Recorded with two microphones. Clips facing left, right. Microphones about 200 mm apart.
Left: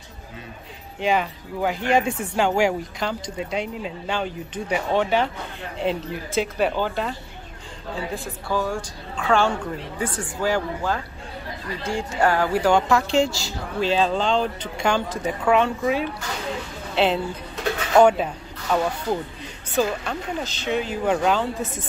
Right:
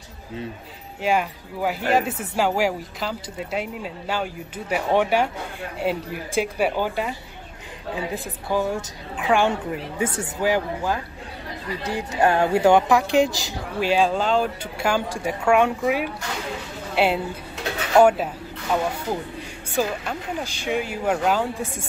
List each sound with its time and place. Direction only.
1.0 s a woman's voice: 10° right (ahead or behind)
19.7 s speech: 10° right (ahead or behind)